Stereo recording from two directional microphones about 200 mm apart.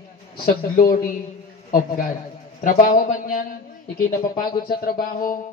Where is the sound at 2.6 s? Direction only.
45° left (ahead or behind).